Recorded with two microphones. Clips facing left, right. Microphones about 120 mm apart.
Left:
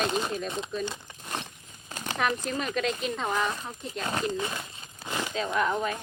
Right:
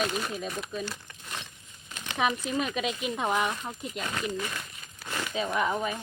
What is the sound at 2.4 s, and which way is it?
Speech, 5° right (ahead or behind).